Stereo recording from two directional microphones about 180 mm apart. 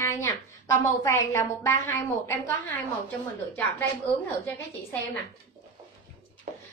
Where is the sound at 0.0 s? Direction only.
15° left (ahead or behind).